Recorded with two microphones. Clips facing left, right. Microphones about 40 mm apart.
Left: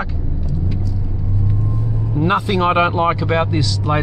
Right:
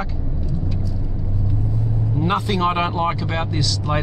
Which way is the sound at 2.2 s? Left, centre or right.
Centre.